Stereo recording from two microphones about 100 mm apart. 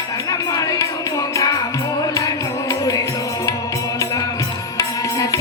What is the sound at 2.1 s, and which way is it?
Music, 35° left (ahead or behind).